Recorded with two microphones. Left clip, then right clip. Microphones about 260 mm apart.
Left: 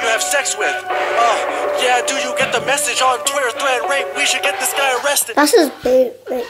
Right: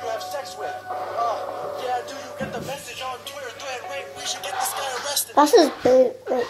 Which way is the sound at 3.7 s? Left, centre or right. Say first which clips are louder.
Left 13 dB; left.